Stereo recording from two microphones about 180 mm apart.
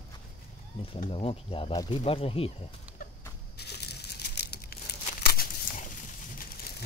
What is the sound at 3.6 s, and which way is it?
Crumpling, 65° left (ahead or behind).